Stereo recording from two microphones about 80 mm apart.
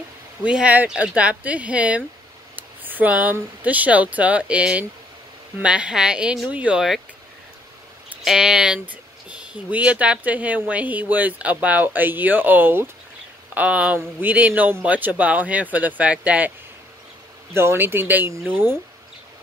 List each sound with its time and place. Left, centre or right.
0.4 s speech: centre
2.5 s a sound: right
3.6 s speech: centre
8.2 s speech: centre; by 12.9 s right
13.6 s speech: centre
17.6 s speech: right